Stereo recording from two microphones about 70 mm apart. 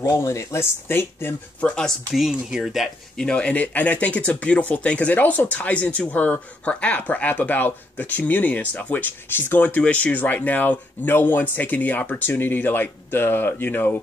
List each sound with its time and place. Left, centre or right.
0.0 s speech: left
2.1 s speech: centre
3.2 s speech: centre